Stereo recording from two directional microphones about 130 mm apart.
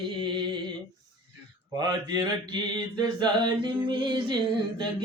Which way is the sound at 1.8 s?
35° right (ahead or behind).